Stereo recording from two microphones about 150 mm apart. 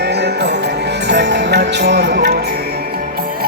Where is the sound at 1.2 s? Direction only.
90° right.